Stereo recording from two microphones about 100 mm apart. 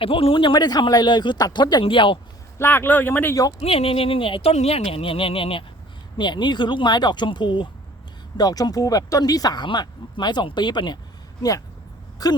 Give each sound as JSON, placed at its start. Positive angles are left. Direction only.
{"t": 0.0, "sound": "speech", "side_deg": 65}
{"t": 1.8, "sound": "speech", "side_deg": 60}
{"t": 2.6, "sound": "speech", "side_deg": 20}
{"t": 3.6, "sound": "speech", "side_deg": 80}
{"t": 6.1, "sound": "speech", "side_deg": 50}
{"t": 12.2, "sound": "speech", "side_deg": 40}